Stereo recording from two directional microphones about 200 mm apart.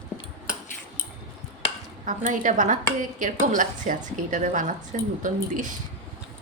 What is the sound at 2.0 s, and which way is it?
A woman's voice, 40° right (ahead or behind).